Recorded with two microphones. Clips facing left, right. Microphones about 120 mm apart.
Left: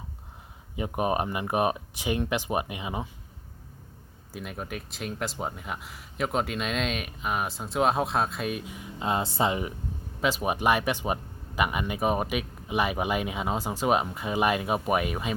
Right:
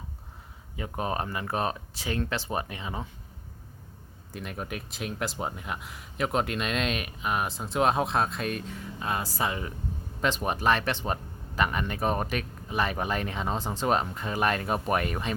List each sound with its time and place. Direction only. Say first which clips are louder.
0.8 s speech: left 4 dB; 15° left (ahead or behind)
4.3 s speech: even; centre (ahead or behind); by 9.7 s 20° left (ahead or behind)
10.2 s speech: left 1 dB; 5° left (ahead or behind)